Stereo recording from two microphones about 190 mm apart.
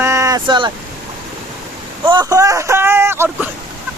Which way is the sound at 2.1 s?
20° right (ahead or behind).